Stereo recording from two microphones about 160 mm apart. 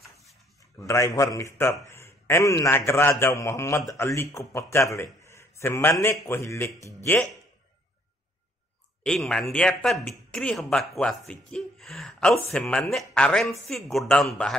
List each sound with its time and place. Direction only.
0.8 s a man's voice: 20° left (ahead or behind)
9.0 s a man's voice: 5° left (ahead or behind)